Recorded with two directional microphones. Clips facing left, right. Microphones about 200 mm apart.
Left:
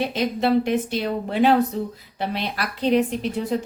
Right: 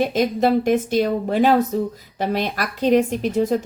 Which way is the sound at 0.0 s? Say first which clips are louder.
Right 4 dB; 45° right (ahead or behind).